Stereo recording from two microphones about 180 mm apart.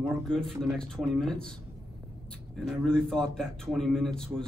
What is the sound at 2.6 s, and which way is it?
A man's voice, centre (ahead or behind).